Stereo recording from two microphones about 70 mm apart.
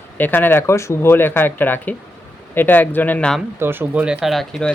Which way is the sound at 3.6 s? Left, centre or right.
Right.